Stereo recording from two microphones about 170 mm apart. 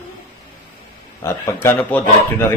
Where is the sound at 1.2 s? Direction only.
15° left (ahead or behind).